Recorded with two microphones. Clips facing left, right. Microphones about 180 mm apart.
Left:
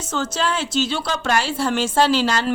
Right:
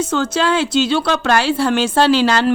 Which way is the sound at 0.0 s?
65° right (ahead or behind).